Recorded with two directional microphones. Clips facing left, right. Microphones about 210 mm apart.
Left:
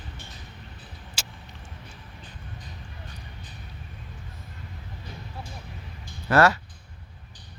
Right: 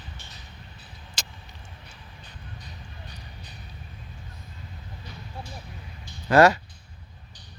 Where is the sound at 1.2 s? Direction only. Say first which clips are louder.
Even; 5° left (ahead or behind).